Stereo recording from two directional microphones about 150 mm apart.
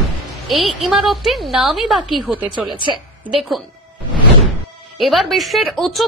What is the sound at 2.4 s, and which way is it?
Speech, 30° right (ahead or behind).